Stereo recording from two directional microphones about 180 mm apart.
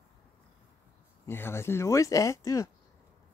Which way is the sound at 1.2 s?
15° left (ahead or behind).